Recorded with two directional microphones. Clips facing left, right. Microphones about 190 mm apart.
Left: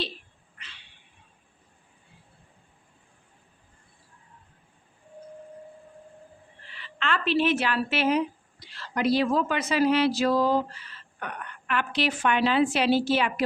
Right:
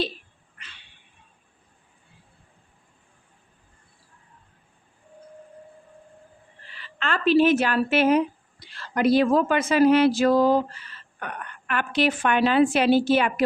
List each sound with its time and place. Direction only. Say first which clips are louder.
6.7 s a woman's voice: right 1 dB; 40° right (ahead or behind)